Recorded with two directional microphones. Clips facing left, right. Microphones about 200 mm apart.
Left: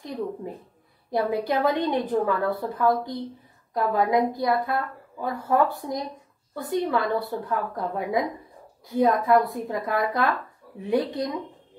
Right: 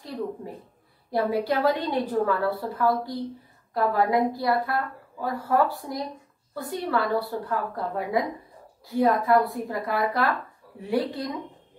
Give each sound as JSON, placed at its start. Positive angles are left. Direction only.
{"t": 1.1, "sound": "a woman's voice", "side_deg": 20}